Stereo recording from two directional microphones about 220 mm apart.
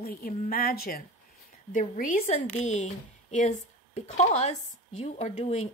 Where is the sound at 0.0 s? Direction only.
45° left (ahead or behind).